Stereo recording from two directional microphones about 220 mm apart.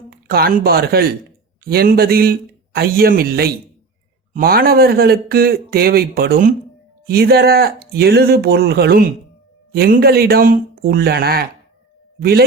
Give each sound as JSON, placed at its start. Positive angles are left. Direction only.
{"t": 0.1, "sound": "speech", "side_deg": -45}